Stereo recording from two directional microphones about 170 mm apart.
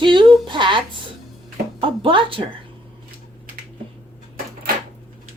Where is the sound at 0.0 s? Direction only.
30° right (ahead or behind).